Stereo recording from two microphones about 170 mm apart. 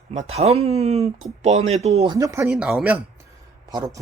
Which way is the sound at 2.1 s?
20° right (ahead or behind).